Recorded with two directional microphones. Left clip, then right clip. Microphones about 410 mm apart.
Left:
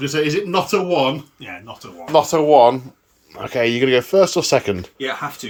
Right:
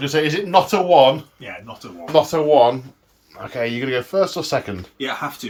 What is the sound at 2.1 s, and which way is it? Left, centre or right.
Speech, centre.